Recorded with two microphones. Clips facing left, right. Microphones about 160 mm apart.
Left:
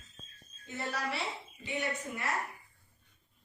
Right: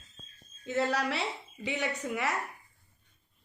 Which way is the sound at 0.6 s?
90° right.